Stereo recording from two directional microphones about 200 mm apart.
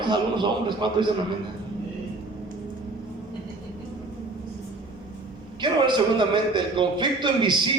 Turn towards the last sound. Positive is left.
turn(degrees=-25)  # may be behind; listen again after turning